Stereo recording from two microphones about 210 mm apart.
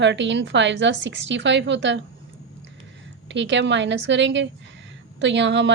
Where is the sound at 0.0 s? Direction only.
60° right (ahead or behind).